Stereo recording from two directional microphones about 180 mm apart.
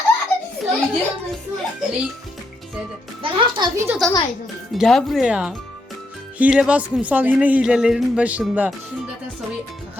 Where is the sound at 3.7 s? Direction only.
15° right (ahead or behind).